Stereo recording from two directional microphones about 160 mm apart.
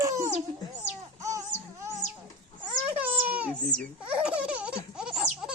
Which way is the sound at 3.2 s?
10° right (ahead or behind).